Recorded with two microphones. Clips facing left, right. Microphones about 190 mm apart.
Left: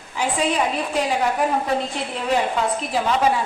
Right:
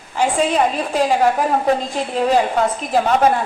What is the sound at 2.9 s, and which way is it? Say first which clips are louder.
Speech: right 5 dB; 50° right (ahead or behind).